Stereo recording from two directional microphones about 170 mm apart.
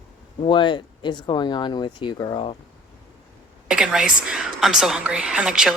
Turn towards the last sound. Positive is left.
turn(degrees=-5)  # may be behind; listen again after turning